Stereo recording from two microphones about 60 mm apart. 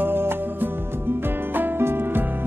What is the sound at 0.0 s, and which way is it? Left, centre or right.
Music, right.